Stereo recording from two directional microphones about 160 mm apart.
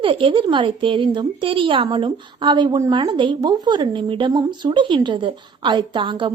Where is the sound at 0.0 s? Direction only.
35° right (ahead or behind).